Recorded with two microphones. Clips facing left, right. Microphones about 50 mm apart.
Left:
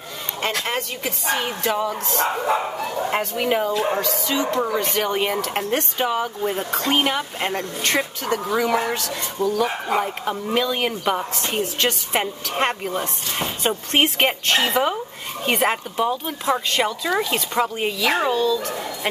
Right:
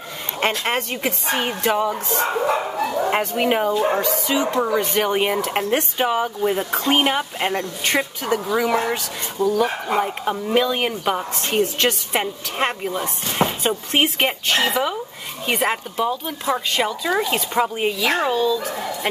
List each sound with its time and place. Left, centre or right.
0.7 s a woman's voice: right
1.5 s speech: centre